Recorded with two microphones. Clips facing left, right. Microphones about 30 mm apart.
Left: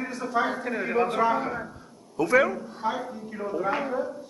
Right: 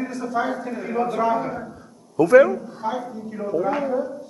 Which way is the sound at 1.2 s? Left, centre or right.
Centre.